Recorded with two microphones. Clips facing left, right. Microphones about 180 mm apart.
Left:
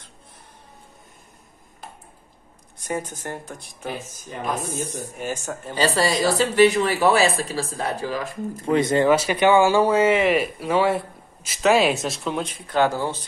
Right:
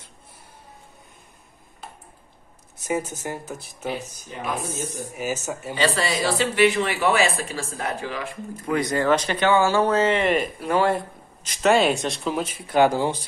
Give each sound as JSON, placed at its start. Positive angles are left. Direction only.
{"t": 2.8, "sound": "speech", "side_deg": -5}
{"t": 5.1, "sound": "speech", "side_deg": -5}
{"t": 5.8, "sound": "a woman's voice", "side_deg": 40}
{"t": 8.7, "sound": "speech", "side_deg": 25}
{"t": 9.1, "sound": "speech", "side_deg": 10}